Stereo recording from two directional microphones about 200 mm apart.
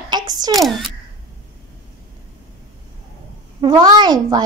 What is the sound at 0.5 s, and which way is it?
Speech, centre (ahead or behind).